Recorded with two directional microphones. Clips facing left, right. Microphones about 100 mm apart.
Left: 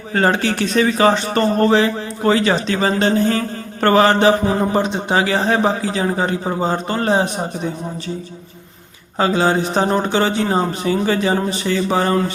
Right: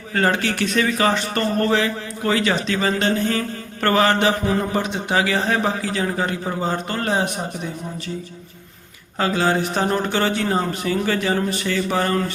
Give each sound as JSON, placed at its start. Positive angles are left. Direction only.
{"t": 0.1, "sound": "a man's voice", "side_deg": 30}
{"t": 9.1, "sound": "a man's voice", "side_deg": 25}